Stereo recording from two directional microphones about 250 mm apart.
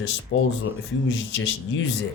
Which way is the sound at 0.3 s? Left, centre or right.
Left.